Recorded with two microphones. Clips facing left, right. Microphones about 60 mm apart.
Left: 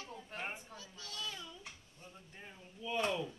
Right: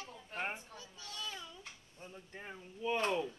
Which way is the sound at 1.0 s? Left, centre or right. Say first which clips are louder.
Even; centre.